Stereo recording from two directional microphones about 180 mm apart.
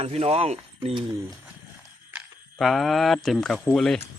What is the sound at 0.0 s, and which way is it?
Speech, 35° right (ahead or behind).